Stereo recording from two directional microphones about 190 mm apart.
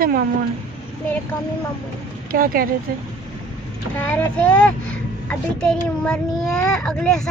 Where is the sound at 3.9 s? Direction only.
10° left (ahead or behind).